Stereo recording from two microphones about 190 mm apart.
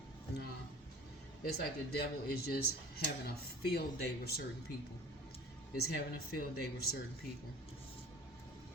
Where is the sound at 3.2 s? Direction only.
55° left (ahead or behind).